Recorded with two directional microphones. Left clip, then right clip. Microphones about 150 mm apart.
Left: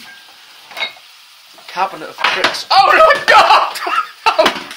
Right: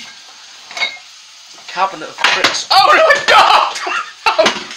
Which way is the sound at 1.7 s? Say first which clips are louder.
Right 2 dB; 5° right (ahead or behind).